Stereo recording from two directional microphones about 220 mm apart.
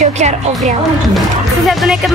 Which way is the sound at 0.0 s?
30° right (ahead or behind).